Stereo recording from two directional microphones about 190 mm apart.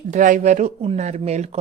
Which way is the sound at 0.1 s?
40° right (ahead or behind).